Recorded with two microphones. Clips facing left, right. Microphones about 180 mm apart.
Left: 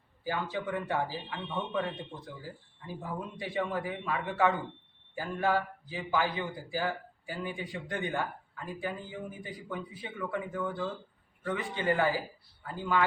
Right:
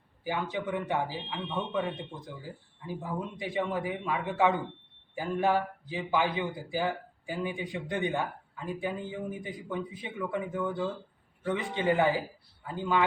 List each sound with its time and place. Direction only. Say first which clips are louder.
0.5 s a man's voice: right 1 dB; 15° right (ahead or behind)